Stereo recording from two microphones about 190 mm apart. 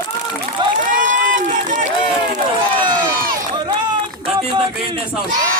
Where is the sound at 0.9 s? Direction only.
45° right (ahead or behind).